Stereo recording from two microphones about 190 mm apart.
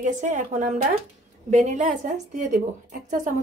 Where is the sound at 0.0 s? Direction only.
40° right (ahead or behind).